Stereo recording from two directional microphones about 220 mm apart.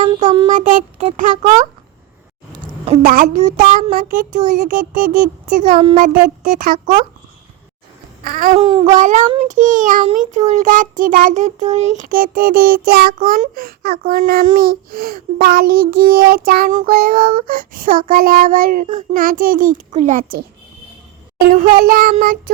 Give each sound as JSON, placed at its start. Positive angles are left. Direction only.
{"t": 0.2, "sound": "child singing", "side_deg": -20}
{"t": 0.5, "sound": "child singing", "side_deg": -35}
{"t": 2.8, "sound": "child singing", "side_deg": -35}
{"t": 5.7, "sound": "child singing", "side_deg": -25}
{"t": 6.0, "sound": "child singing", "side_deg": -40}
{"t": 8.2, "sound": "child singing", "side_deg": -40}
{"t": 8.5, "sound": "child singing", "side_deg": -25}
{"t": 21.4, "sound": "child singing", "side_deg": -40}